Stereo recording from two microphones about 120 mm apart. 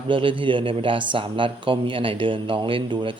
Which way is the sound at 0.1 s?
45° right (ahead or behind).